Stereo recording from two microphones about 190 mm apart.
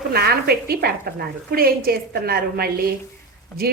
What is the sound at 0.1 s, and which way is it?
A woman's voice, 55° right (ahead or behind).